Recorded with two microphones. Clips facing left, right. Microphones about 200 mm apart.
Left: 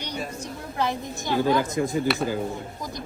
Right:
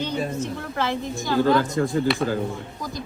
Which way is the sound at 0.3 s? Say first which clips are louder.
Right 3 dB; 15° left (ahead or behind).